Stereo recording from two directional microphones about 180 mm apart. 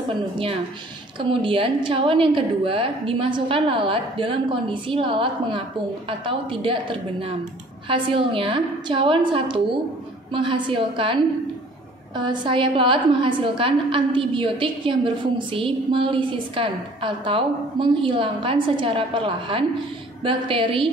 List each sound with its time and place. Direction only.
1.4 s a woman's voice: 30° right (ahead or behind)
12.2 s a woman's voice: 25° right (ahead or behind)